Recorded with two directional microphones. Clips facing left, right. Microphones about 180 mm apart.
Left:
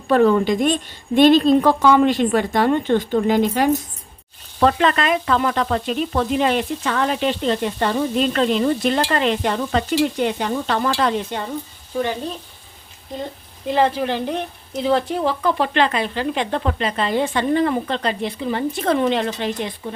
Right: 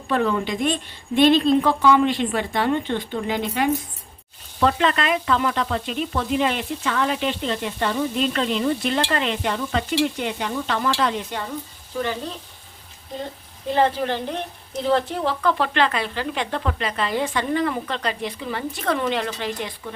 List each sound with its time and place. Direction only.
0.1 s speech: 45° left (ahead or behind)
11.3 s a woman's voice: 25° left (ahead or behind)
13.7 s a woman's voice: 15° left (ahead or behind)